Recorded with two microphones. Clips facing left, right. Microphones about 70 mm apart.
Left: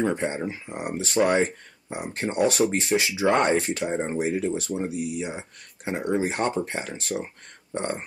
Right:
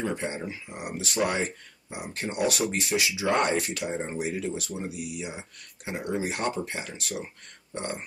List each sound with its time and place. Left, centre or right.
0.0 s speech: left